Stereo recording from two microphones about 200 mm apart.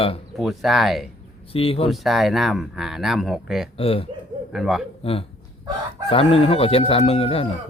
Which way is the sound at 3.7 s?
30° left (ahead or behind).